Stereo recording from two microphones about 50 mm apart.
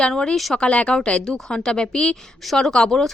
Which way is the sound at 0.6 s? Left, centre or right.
Left.